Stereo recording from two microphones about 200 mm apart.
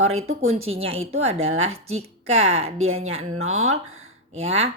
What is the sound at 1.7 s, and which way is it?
Speech, 30° right (ahead or behind).